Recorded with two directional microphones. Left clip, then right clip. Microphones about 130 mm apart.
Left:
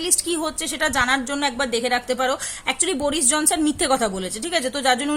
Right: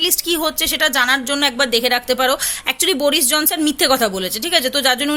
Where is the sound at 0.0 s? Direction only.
20° right (ahead or behind).